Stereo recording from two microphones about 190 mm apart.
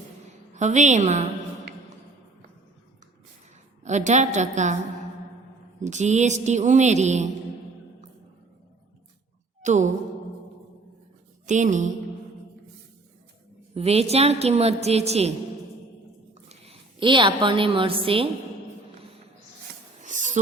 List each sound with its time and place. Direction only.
0.5 s a woman's voice: 40° right (ahead or behind)
3.8 s a woman's voice: 40° right (ahead or behind)
5.8 s a woman's voice: 40° right (ahead or behind)
9.6 s a sound: 40° right (ahead or behind)
11.4 s a woman's voice: 40° right (ahead or behind)
13.7 s a woman's voice: 30° right (ahead or behind)
16.5 s a woman's voice: 30° right (ahead or behind)
20.1 s sniff: 40° right (ahead or behind)